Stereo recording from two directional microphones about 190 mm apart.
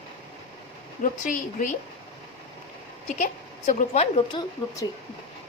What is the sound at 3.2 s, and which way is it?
A woman's voice, 40° left (ahead or behind).